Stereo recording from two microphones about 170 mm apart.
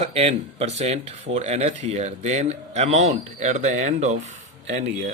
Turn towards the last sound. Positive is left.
turn(degrees=-45)  # may be behind; listen again after turning